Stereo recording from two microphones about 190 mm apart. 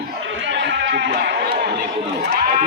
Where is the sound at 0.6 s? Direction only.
70° right (ahead or behind).